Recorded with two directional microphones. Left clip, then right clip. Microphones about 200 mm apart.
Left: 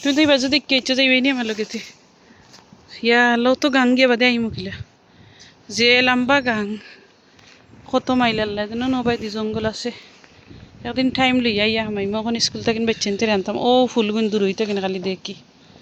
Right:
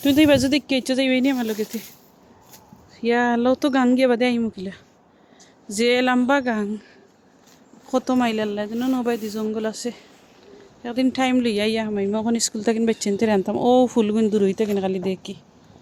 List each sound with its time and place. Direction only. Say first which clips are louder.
0.0 s speech: even; 20° right (ahead or behind)
2.9 s a man's voice: left 4 dB; centre (ahead or behind)
12.1 s speech: left 2 dB; 15° right (ahead or behind)